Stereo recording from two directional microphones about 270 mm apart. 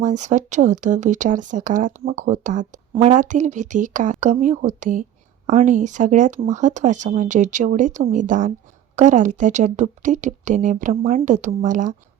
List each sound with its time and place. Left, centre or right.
0.0 s speech: right